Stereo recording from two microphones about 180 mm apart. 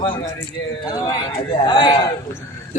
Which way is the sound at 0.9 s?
20° left (ahead or behind).